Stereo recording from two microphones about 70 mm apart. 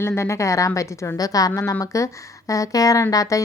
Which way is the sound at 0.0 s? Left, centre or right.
Left.